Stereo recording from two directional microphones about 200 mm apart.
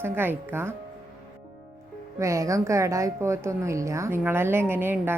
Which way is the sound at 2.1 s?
15° right (ahead or behind).